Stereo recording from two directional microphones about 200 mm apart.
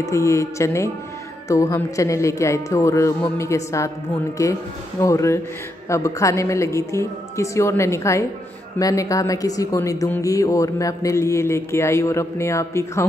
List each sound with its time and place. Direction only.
0.0 s speech: 15° left (ahead or behind)